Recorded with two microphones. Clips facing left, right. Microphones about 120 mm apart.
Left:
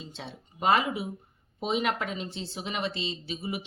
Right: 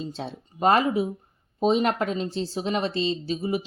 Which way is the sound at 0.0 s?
40° right (ahead or behind).